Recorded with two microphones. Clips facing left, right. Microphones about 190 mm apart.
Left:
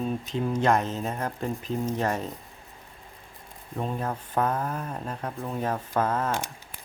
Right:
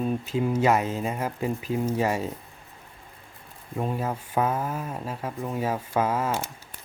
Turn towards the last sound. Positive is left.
turn(degrees=-5)  # may be behind; listen again after turning